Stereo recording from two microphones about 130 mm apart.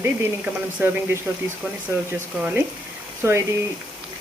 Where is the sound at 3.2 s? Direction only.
20° right (ahead or behind).